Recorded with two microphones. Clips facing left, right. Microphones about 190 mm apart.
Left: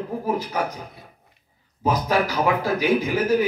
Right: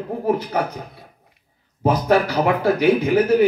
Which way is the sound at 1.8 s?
60° right (ahead or behind).